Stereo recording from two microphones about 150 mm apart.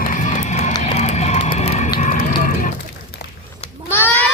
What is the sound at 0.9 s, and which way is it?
Music, 50° left (ahead or behind).